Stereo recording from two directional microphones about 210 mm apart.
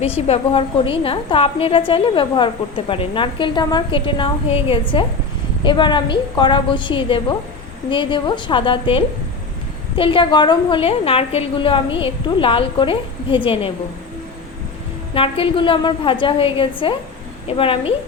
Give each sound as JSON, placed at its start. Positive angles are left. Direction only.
{"t": 0.3, "sound": "a woman's voice", "side_deg": 25}
{"t": 15.1, "sound": "a woman's voice", "side_deg": 25}